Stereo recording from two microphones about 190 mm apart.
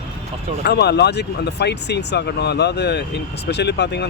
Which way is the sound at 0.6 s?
60° left (ahead or behind).